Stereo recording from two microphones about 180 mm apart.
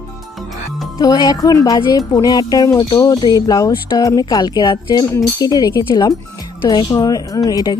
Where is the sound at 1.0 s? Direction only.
20° left (ahead or behind).